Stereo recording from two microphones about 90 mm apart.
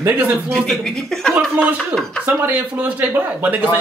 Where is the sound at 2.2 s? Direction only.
20° right (ahead or behind).